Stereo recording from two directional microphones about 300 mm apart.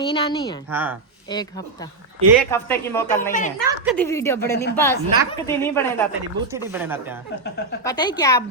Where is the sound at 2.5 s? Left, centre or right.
Centre.